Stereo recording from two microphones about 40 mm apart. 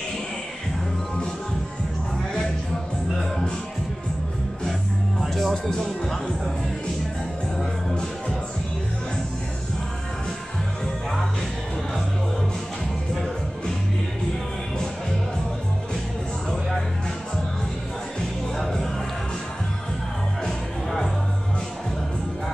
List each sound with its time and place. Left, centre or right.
5.2 s music: centre
5.7 s speech: centre
18.6 s music: centre